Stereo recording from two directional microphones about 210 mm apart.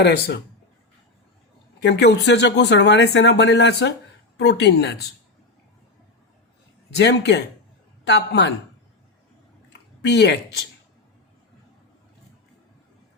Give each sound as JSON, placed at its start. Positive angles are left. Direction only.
{"t": 0.0, "sound": "speech", "side_deg": 55}
{"t": 1.8, "sound": "speech", "side_deg": 55}
{"t": 7.0, "sound": "speech", "side_deg": 55}
{"t": 10.0, "sound": "speech", "side_deg": 55}